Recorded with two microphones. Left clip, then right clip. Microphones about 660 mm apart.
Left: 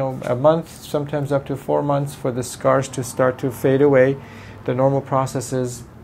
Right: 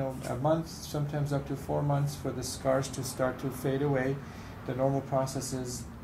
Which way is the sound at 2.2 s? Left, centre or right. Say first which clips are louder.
Left 12 dB; left.